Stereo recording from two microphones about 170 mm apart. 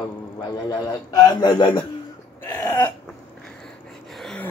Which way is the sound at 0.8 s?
25° left (ahead or behind).